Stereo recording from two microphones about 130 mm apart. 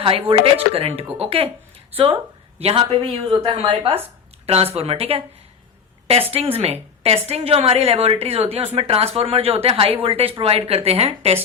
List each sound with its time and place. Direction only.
0.0 s a woman's voice: 40° right (ahead or behind)
2.6 s a woman's voice: 50° right (ahead or behind)
6.3 s a woman's voice: 50° right (ahead or behind)